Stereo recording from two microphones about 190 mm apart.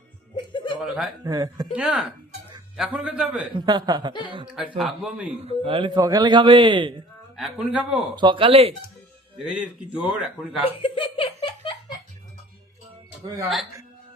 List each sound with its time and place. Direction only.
0.3 s music: 25° left (ahead or behind)
0.8 s speech: 5° right (ahead or behind)
1.2 s speech: 20° right (ahead or behind)
1.7 s a man's voice: 5° right (ahead or behind)
3.5 s speech: 20° right (ahead or behind)
4.8 s speech: 5° right (ahead or behind)
5.4 s speech: 30° right (ahead or behind)
7.3 s speech: 5° right (ahead or behind)
8.1 s speech: 25° right (ahead or behind)
9.6 s speech: 5° right (ahead or behind)
10.6 s giggle: 30° left (ahead or behind)